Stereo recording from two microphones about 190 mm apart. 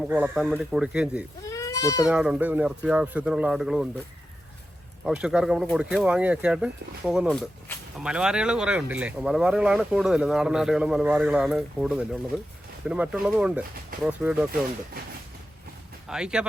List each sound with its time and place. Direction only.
0.1 s speech: 5° right (ahead or behind)
1.5 s goat: 15° left (ahead or behind)
2.0 s speech: 5° right (ahead or behind)
5.0 s speech: 5° right (ahead or behind)
16.0 s speech: 5° right (ahead or behind)